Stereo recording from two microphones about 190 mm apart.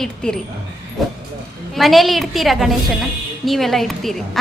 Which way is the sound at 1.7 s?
Centre (ahead or behind).